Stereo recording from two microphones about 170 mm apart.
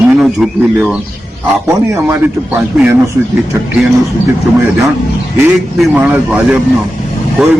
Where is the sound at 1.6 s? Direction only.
15° right (ahead or behind).